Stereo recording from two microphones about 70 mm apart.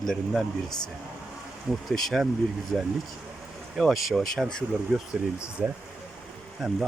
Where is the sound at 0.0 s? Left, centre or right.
Centre.